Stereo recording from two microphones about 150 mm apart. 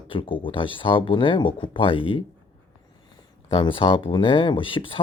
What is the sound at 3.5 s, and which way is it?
Speech, 35° left (ahead or behind).